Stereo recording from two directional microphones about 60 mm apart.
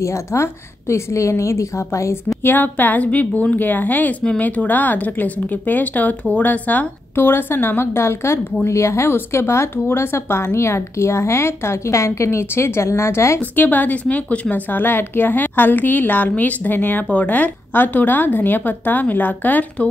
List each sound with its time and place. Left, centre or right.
0.0 s a woman's voice: left
2.4 s speech: left
7.2 s a woman's voice: left
13.4 s a woman's voice: left